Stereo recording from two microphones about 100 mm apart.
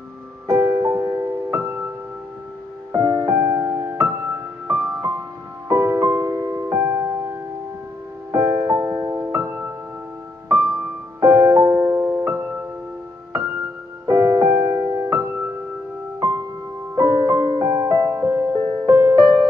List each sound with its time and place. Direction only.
0.5 s music: 25° right (ahead or behind)
2.9 s music: 35° right (ahead or behind)
8.3 s music: 25° right (ahead or behind)
11.1 s music: 25° right (ahead or behind)
16.9 s music: 30° right (ahead or behind)